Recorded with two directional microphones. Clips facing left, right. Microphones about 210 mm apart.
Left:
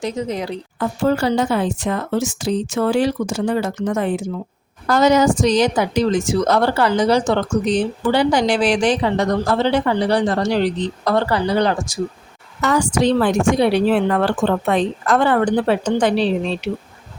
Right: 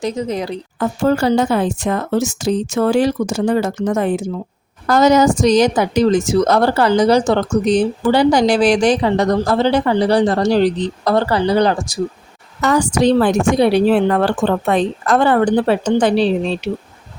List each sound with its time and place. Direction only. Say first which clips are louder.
0.0 s a woman's voice: right 2 dB; 40° right (ahead or behind)